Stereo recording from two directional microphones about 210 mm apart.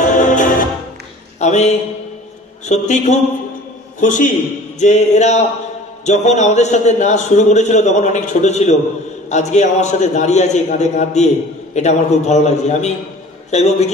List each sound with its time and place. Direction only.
0.0 s music: 35° left (ahead or behind)
1.4 s a man's voice: 30° left (ahead or behind)